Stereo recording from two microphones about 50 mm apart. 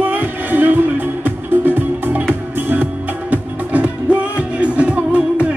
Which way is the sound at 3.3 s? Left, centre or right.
Right.